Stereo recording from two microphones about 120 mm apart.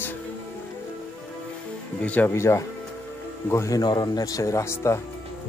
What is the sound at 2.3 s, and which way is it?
Speech, 25° left (ahead or behind).